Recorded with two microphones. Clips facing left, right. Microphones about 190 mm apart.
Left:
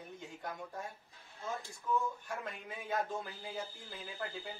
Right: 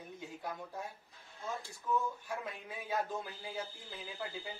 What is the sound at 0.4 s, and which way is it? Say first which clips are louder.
Speech: even; 5° right (ahead or behind).